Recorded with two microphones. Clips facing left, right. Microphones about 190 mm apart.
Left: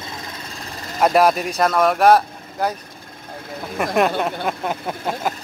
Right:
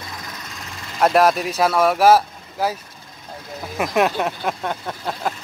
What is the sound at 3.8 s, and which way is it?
Speech, centre (ahead or behind).